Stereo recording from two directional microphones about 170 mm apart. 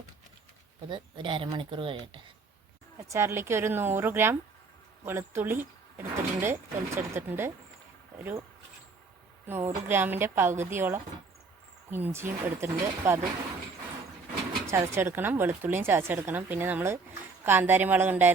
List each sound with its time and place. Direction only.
0.9 s speech: 30° right (ahead or behind)
3.0 s speech: 15° right (ahead or behind)
9.5 s speech: 15° right (ahead or behind)
14.7 s speech: 15° right (ahead or behind)